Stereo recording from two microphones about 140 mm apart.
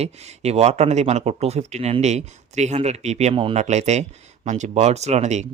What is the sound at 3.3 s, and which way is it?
Speech, 40° right (ahead or behind).